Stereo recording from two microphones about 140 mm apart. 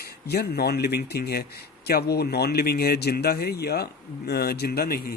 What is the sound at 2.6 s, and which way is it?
A man's voice, 90° left.